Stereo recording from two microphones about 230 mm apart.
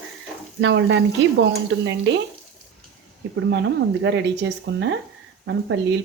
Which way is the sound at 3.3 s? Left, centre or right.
Right.